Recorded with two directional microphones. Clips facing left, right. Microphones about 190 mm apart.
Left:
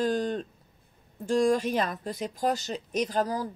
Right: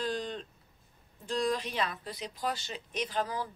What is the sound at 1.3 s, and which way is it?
Speech, 45° left (ahead or behind).